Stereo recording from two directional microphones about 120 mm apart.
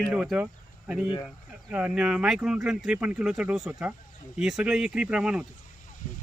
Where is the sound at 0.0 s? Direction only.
5° right (ahead or behind).